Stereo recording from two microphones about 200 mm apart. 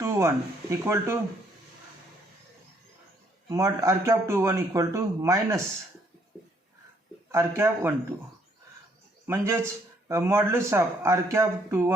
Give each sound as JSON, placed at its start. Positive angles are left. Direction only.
{"t": 0.0, "sound": "speech", "side_deg": -15}
{"t": 3.5, "sound": "speech", "side_deg": -15}
{"t": 7.3, "sound": "speech", "side_deg": -15}
{"t": 9.2, "sound": "speech", "side_deg": -10}